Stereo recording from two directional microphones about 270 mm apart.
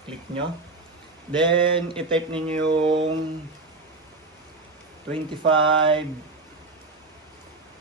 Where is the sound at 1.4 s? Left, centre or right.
Centre.